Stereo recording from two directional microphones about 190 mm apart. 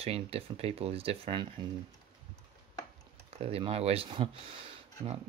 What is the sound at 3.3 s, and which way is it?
Speech, 30° right (ahead or behind).